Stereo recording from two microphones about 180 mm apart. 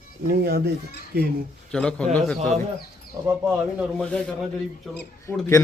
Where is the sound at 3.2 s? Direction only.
25° right (ahead or behind).